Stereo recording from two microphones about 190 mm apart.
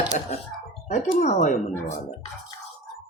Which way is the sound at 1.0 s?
40° left (ahead or behind).